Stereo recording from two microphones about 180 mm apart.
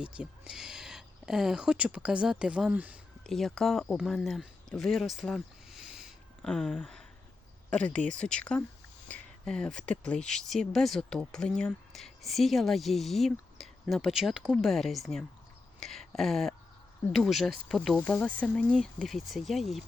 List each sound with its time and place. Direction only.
0.0 s speech: 5° right (ahead or behind)